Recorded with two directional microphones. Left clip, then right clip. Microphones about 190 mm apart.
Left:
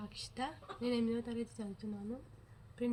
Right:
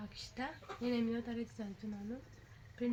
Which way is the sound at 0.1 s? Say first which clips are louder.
Left 2 dB; 25° left (ahead or behind).